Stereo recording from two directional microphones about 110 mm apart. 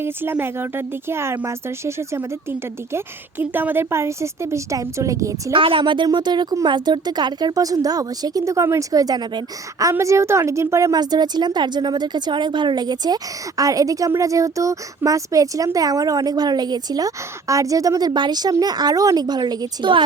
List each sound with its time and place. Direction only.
0.0 s speech: 20° right (ahead or behind)
5.5 s a woman's voice: 50° right (ahead or behind)